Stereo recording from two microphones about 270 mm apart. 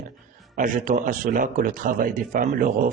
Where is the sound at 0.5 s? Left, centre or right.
Right.